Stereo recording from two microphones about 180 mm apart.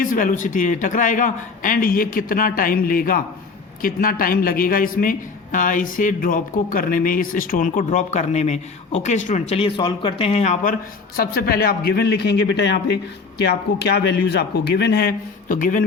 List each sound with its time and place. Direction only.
0.0 s a man's voice: 50° left (ahead or behind)
11.2 s a man's voice: 55° left (ahead or behind)
15.4 s a man's voice: 50° left (ahead or behind)